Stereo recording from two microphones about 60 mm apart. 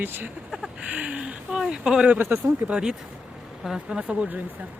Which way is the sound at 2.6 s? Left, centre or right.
Centre.